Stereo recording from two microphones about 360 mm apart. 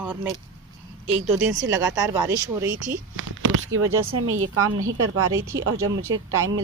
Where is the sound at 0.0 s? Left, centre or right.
Centre.